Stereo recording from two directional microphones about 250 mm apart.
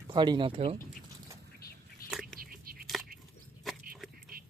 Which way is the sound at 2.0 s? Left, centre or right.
Centre.